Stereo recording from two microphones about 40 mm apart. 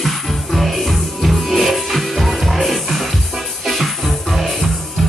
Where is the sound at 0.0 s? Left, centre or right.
Centre.